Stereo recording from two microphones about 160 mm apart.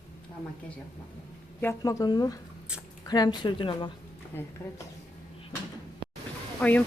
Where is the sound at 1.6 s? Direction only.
20° left (ahead or behind).